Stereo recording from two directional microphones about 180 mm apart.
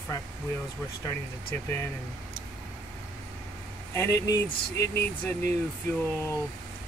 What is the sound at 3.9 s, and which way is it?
Speech, 15° left (ahead or behind).